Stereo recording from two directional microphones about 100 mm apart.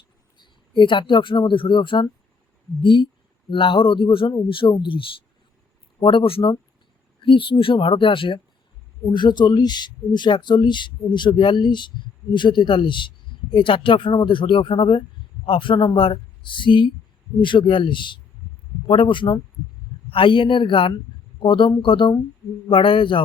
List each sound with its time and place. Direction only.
0.3 s a man's voice: 55° left (ahead or behind)
9.1 s a man's voice: 45° left (ahead or behind)